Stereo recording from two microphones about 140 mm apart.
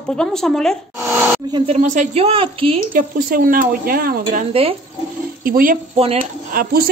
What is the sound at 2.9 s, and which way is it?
Speech, 90° right.